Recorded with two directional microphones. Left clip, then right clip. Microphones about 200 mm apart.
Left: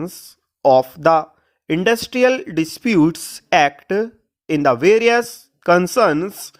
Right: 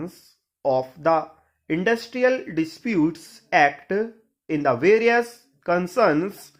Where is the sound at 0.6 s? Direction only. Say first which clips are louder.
Left 9 dB; 45° left (ahead or behind).